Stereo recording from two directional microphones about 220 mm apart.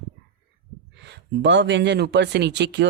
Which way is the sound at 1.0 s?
50° right (ahead or behind).